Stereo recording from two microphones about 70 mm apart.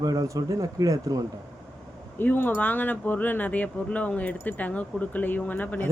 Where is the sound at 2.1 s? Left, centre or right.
Left.